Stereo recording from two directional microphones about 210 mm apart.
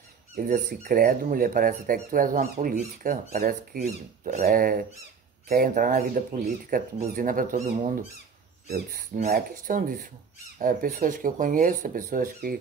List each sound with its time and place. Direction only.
0.4 s speech: 40° right (ahead or behind)